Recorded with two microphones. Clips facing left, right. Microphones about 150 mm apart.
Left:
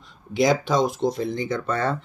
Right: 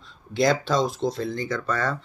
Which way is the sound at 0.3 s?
15° left (ahead or behind).